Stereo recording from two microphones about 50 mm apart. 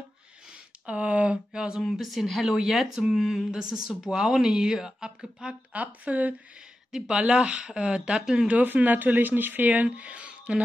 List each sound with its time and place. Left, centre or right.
0.8 s speech: right
1.8 s speech: centre
5.7 s speech: right
6.9 s speech: centre
8.5 s speech: right
9.8 s speech: right